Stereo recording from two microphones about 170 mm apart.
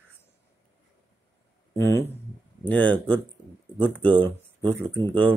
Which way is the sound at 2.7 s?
10° left (ahead or behind).